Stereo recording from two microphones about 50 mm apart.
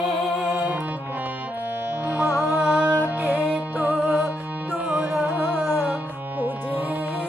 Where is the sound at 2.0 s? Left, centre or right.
Right.